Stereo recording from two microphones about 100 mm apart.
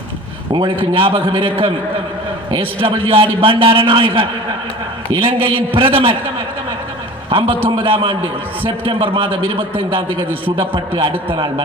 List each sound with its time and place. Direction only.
0.5 s a man's voice: 55° right (ahead or behind)
7.3 s a man's voice: 65° right (ahead or behind)